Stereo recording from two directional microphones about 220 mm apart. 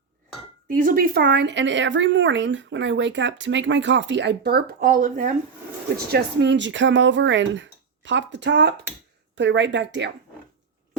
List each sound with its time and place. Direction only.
0.7 s speech: 40° right (ahead or behind)
6.1 s speech: 50° right (ahead or behind)